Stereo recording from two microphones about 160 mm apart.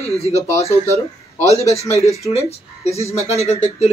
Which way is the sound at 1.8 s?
40° left (ahead or behind).